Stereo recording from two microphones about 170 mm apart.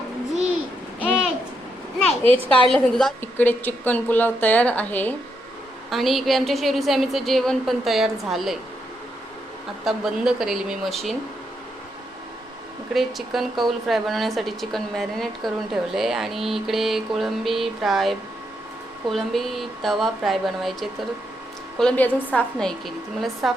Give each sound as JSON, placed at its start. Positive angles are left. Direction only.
{"t": 2.2, "sound": "a woman's voice", "side_deg": -35}
{"t": 2.6, "sound": "a woman's voice", "side_deg": 0}
{"t": 9.8, "sound": "a woman's voice", "side_deg": -5}
{"t": 12.9, "sound": "a woman's voice", "side_deg": 0}